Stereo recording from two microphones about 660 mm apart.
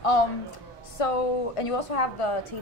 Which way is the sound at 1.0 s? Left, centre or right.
Left.